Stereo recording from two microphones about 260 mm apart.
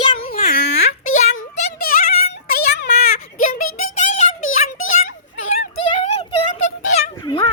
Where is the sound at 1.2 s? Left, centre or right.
Left.